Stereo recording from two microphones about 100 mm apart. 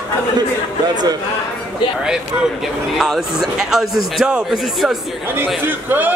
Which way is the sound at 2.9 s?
Centre (ahead or behind).